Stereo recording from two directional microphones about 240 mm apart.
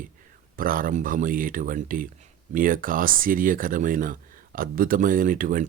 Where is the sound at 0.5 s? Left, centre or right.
Right.